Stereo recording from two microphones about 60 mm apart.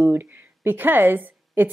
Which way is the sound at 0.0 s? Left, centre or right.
Right.